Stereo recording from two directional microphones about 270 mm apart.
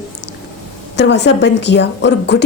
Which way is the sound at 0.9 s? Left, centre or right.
Left.